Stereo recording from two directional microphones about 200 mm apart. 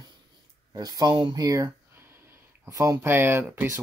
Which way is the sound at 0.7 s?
20° right (ahead or behind).